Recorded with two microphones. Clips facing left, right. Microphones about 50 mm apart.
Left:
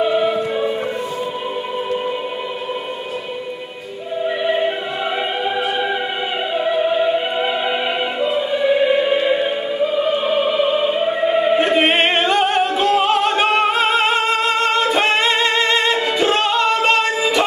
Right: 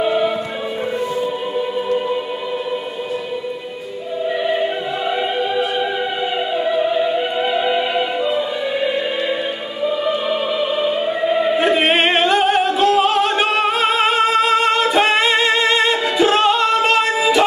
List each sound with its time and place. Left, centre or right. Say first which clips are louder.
0.0 s music: even; centre
4.4 s music: even; centre
8.3 s choir: left 3 dB; centre
10.0 s opera: left 2 dB; centre
11.5 s music: even; centre
16.4 s singing: right 1 dB; centre